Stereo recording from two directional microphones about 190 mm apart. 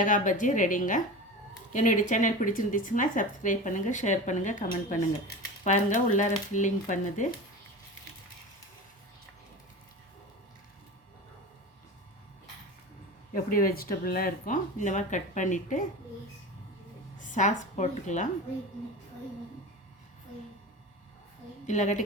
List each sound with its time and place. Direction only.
0.0 s speech: 45° left (ahead or behind)
13.3 s speech: 50° left (ahead or behind)
17.2 s a woman's voice: 40° left (ahead or behind)
21.7 s speech: 40° left (ahead or behind)